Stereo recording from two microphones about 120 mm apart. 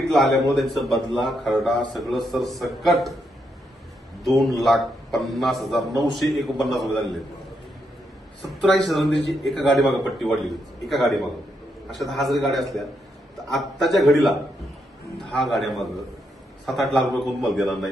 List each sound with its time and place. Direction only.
0.1 s a man's voice: centre (ahead or behind)
4.2 s a man's voice: centre (ahead or behind)
8.4 s a man's voice: centre (ahead or behind)
17.6 s a man's voice: centre (ahead or behind)